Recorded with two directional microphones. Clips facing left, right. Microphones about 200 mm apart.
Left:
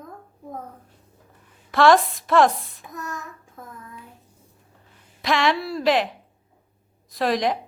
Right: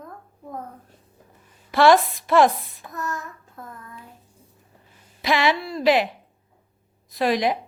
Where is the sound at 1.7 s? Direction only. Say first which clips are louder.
Even; centre (ahead or behind).